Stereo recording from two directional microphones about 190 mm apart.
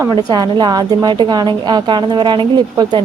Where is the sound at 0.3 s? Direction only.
20° right (ahead or behind).